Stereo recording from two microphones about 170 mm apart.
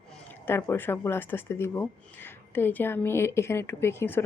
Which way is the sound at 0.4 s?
15° left (ahead or behind).